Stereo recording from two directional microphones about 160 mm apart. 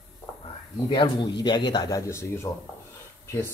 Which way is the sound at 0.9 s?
30° left (ahead or behind).